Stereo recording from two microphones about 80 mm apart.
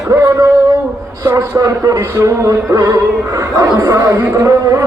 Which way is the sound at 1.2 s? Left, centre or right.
Right.